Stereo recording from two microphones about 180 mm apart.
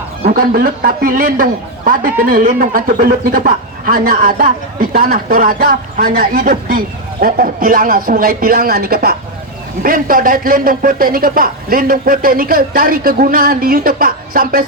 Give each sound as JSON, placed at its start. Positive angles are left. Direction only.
{"t": 0.3, "sound": "a man's voice", "side_deg": -55}